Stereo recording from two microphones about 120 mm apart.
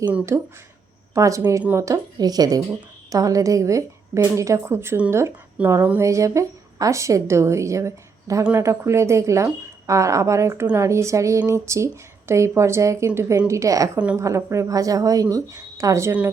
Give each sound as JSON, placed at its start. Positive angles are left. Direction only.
{"t": 0.3, "sound": "a woman's voice", "side_deg": -25}